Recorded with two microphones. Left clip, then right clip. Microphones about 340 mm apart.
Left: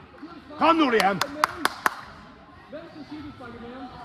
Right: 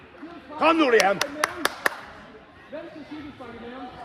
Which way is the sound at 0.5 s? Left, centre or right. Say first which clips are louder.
Right 1 dB; left.